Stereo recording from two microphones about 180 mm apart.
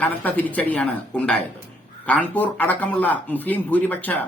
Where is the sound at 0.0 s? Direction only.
10° left (ahead or behind).